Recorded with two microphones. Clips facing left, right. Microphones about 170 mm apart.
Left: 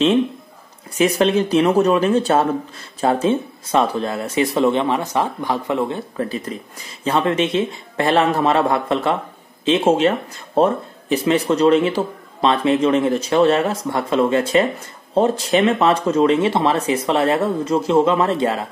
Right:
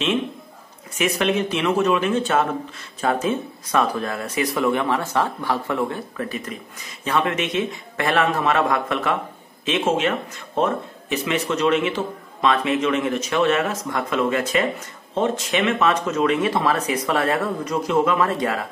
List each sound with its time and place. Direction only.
0.9 s speech: 35° left (ahead or behind)